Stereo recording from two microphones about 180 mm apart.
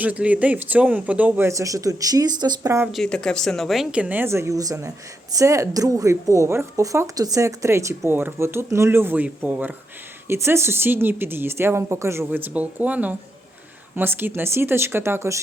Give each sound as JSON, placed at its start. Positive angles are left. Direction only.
{"t": 0.0, "sound": "a woman's voice", "side_deg": -10}
{"t": 2.9, "sound": "a woman's voice", "side_deg": 5}